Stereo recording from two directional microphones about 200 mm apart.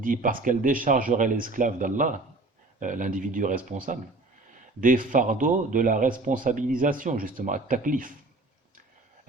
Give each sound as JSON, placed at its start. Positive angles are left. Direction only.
{"t": 0.0, "sound": "a man's voice", "side_deg": -40}